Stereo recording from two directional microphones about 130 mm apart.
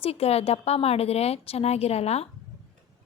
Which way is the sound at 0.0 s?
50° left (ahead or behind).